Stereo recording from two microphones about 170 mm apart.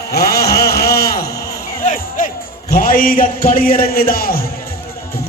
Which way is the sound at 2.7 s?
55° left (ahead or behind).